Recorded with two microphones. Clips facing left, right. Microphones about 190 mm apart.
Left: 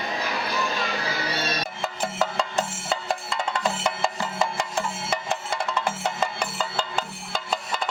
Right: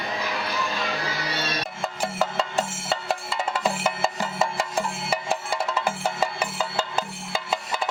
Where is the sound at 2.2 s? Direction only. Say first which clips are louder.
Even; 5° right (ahead or behind).